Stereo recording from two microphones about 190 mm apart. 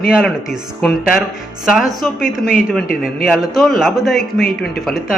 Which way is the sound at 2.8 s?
50° left (ahead or behind).